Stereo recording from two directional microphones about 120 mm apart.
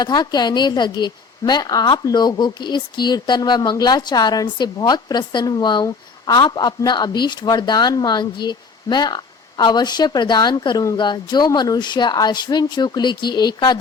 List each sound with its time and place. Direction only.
0.0 s a woman's voice: 35° left (ahead or behind)